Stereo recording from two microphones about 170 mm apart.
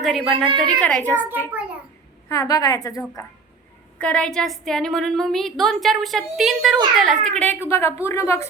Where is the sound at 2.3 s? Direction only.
20° left (ahead or behind).